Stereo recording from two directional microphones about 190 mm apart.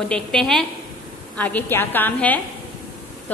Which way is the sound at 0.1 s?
5° left (ahead or behind).